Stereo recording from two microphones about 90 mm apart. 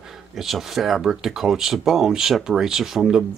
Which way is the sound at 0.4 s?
5° right (ahead or behind).